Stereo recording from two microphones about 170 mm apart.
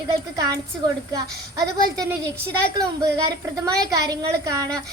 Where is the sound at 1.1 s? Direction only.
20° right (ahead or behind).